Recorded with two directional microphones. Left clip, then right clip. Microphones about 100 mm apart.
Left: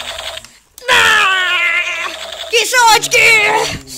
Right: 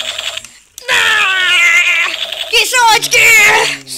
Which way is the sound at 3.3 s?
10° right (ahead or behind).